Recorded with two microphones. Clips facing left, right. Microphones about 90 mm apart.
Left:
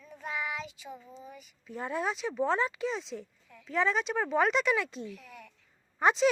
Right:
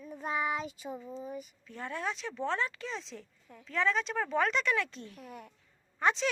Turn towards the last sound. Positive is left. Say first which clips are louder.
# left 4 dB
turn(degrees=15)  # may be behind; listen again after turning